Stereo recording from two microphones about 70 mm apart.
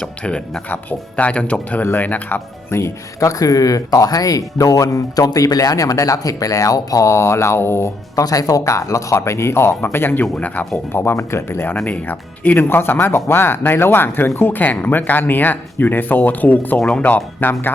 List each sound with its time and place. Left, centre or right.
0.0 s speech: centre
2.6 s speech: left
8.1 s speech: left
10.9 s speech: left; by 17.2 s centre